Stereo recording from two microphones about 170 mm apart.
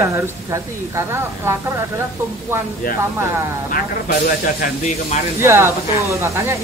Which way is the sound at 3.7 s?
60° left (ahead or behind).